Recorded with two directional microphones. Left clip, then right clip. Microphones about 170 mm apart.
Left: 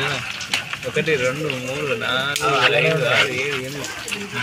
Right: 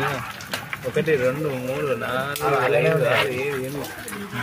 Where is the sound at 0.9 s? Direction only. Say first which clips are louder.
Left 1 dB; centre (ahead or behind).